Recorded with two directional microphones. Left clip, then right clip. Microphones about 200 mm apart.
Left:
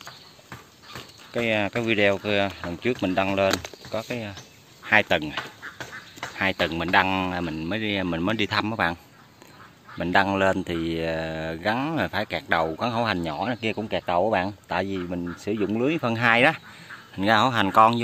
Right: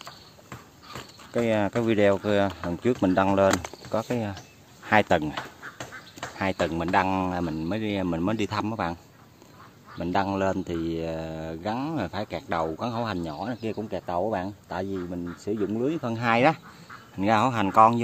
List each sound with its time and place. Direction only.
1.3 s speech: 20° right (ahead or behind)
6.3 s speech: 10° right (ahead or behind)